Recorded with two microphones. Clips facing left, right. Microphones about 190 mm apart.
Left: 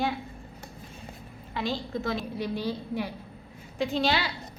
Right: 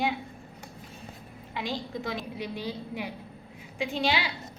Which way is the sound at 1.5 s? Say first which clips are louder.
Left 3 dB; 15° right (ahead or behind).